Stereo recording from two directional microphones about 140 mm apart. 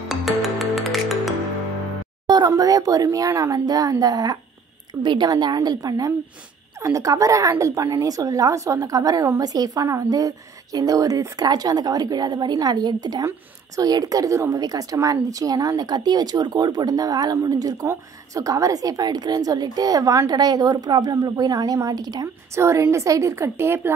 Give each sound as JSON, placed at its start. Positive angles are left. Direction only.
{"t": 0.1, "sound": "music", "side_deg": 0}
{"t": 2.2, "sound": "a woman's voice", "side_deg": -30}